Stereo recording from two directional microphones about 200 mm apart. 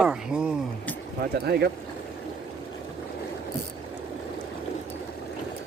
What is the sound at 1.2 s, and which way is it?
Speech, 50° right (ahead or behind).